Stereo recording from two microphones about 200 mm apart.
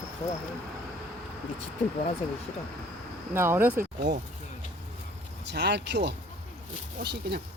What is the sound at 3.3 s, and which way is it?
Speech, 10° right (ahead or behind).